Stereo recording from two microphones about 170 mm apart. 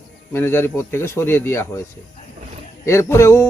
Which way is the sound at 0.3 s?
15° left (ahead or behind).